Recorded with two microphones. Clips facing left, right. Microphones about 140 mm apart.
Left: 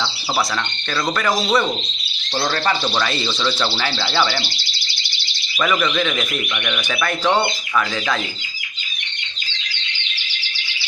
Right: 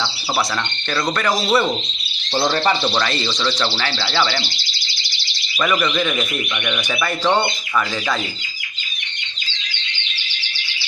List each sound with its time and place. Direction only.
1.1 s speech: centre (ahead or behind)
5.6 s speech: centre (ahead or behind)